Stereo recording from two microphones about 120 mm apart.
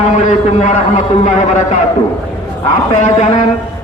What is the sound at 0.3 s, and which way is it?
A man's voice, 85° left.